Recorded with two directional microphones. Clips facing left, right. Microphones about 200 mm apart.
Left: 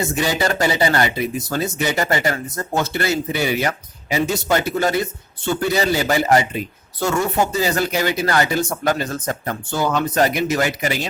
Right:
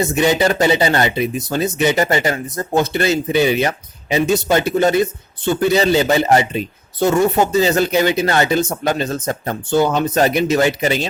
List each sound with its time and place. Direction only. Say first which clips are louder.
0.0 s speech: right 5 dB; 20° right (ahead or behind)